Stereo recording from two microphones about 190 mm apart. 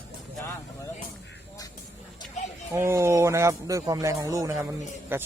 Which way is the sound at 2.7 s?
15° right (ahead or behind).